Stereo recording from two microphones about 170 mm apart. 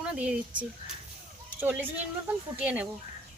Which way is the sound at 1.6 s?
10° right (ahead or behind).